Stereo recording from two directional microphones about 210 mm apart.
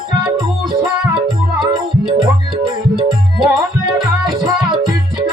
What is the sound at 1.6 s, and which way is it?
Music, 20° right (ahead or behind).